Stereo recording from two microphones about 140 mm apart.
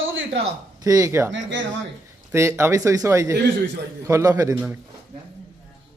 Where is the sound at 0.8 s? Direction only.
25° right (ahead or behind).